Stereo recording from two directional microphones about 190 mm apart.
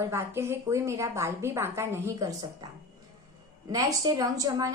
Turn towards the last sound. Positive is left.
turn(degrees=-20)  # may be behind; listen again after turning